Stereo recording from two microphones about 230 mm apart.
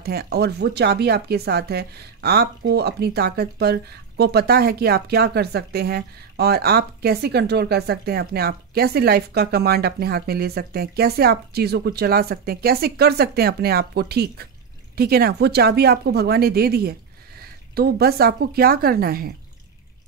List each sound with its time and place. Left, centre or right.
0.0 s speech: right